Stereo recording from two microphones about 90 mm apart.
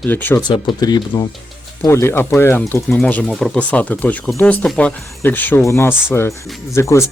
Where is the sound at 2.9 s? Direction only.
15° left (ahead or behind).